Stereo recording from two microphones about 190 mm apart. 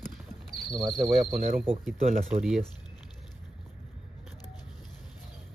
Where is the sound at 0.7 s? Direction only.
10° right (ahead or behind).